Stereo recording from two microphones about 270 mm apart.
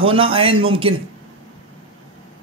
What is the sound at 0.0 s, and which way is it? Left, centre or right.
Speech, centre.